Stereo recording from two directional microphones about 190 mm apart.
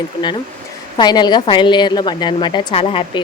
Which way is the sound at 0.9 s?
20° left (ahead or behind).